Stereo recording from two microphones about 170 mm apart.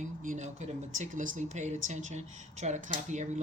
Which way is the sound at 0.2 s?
50° right (ahead or behind).